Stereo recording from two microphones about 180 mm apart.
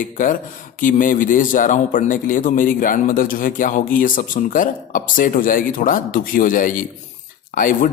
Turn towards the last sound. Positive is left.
turn(degrees=50)  # may be behind; listen again after turning